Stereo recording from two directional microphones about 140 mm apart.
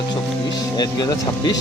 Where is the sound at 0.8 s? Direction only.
30° left (ahead or behind).